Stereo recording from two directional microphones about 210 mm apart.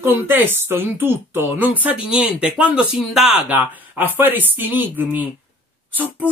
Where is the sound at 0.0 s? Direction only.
10° right (ahead or behind).